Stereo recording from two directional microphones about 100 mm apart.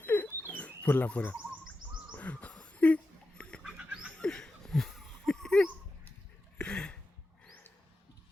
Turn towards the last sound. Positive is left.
turn(degrees=10)  # may be behind; listen again after turning